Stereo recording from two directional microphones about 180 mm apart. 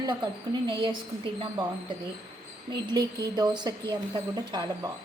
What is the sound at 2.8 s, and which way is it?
A woman's voice, 20° right (ahead or behind).